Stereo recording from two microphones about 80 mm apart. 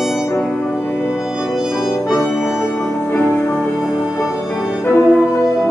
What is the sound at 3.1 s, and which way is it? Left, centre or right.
Music, left.